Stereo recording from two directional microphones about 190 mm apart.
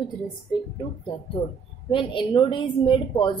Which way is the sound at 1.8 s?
30° left (ahead or behind).